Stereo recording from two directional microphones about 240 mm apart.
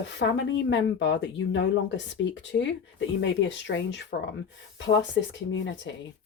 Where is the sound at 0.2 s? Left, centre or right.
Left.